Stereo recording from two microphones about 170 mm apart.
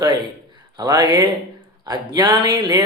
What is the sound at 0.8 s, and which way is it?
A man's voice, 25° right (ahead or behind).